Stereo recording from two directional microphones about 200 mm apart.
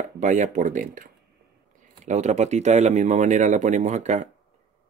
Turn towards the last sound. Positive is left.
turn(degrees=-35)  # may be behind; listen again after turning